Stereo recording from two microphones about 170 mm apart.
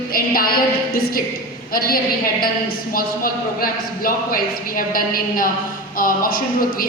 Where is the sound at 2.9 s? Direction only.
60° left (ahead or behind).